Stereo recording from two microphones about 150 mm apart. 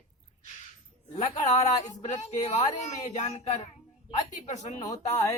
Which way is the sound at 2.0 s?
50° left (ahead or behind).